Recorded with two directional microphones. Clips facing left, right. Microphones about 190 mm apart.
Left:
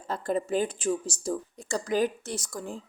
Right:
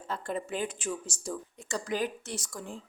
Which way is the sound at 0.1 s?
40° left (ahead or behind).